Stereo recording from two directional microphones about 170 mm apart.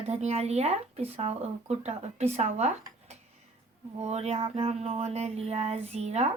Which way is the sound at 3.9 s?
40° right (ahead or behind).